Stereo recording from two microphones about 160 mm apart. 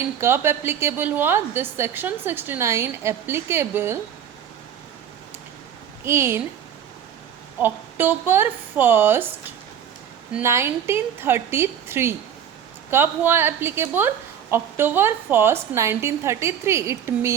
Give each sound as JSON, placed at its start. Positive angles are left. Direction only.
{"t": 0.2, "sound": "a woman's voice", "side_deg": -15}
{"t": 6.1, "sound": "a woman's voice", "side_deg": -15}
{"t": 7.6, "sound": "a woman's voice", "side_deg": -15}
{"t": 10.4, "sound": "a woman's voice", "side_deg": -15}